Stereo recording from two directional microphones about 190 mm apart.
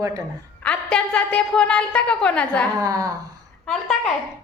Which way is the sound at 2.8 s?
15° right (ahead or behind).